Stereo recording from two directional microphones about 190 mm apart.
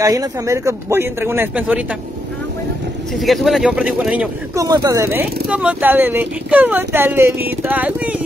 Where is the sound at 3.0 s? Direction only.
Centre (ahead or behind).